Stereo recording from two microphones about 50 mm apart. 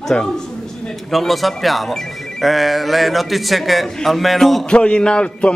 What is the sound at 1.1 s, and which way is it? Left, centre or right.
Speech, centre.